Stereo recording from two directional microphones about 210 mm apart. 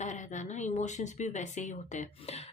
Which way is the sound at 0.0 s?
35° left (ahead or behind).